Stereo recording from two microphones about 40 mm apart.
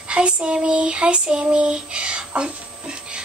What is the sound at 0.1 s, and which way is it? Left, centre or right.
Child singing, right.